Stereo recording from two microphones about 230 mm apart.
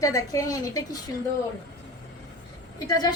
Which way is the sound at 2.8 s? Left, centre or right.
Centre.